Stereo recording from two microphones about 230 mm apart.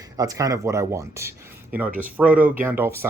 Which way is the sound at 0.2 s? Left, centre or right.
Centre.